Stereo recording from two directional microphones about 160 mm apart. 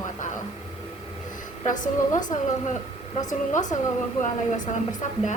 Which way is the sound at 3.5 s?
50° left (ahead or behind).